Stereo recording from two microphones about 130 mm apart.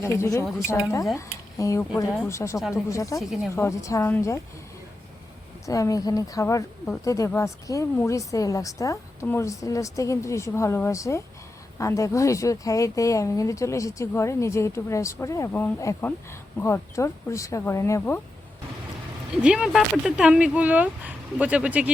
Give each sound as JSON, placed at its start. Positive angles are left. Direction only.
{"t": 0.0, "sound": "speech", "side_deg": 20}
{"t": 3.2, "sound": "speech", "side_deg": 0}
{"t": 3.5, "sound": "speech", "side_deg": 20}
{"t": 5.6, "sound": "speech", "side_deg": 25}
{"t": 19.4, "sound": "speech", "side_deg": -5}